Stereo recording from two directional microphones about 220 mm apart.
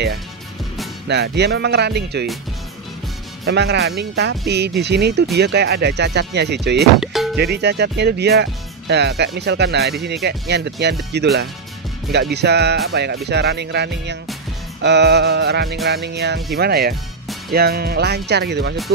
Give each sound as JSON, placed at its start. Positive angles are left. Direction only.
{"t": 1.0, "sound": "speech", "side_deg": -50}
{"t": 3.4, "sound": "speech", "side_deg": -50}
{"t": 7.0, "sound": "music", "side_deg": 0}
{"t": 7.3, "sound": "speech", "side_deg": -45}
{"t": 12.1, "sound": "speech", "side_deg": -50}